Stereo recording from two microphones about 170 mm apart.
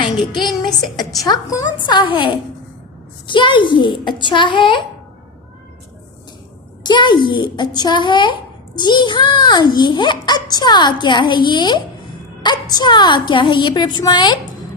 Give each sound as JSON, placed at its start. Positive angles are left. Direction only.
{"t": 1.2, "sound": "a child's voice", "side_deg": 20}
{"t": 6.8, "sound": "a child's voice", "side_deg": 25}